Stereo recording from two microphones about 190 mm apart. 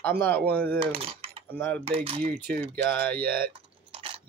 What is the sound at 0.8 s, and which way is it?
Speech, 30° right (ahead or behind).